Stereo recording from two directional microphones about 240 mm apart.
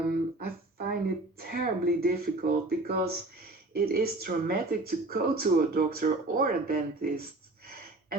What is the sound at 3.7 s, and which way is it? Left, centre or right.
Speech, right.